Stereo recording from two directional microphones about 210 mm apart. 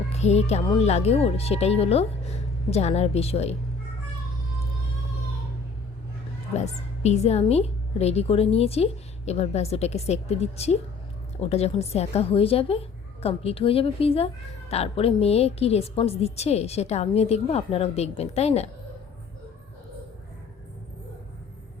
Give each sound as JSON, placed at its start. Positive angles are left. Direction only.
{"t": 0.1, "sound": "a woman's voice", "side_deg": 30}
{"t": 7.0, "sound": "a woman's voice", "side_deg": 30}